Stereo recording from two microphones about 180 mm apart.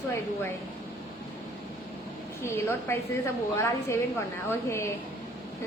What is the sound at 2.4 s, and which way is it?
A woman's voice, 15° left (ahead or behind).